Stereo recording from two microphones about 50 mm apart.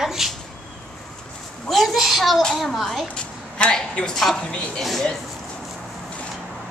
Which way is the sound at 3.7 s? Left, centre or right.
Centre.